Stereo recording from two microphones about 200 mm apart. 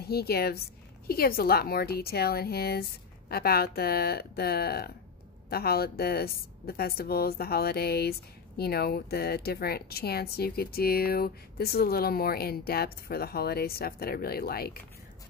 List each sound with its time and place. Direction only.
0.0 s a woman's voice: 50° left (ahead or behind)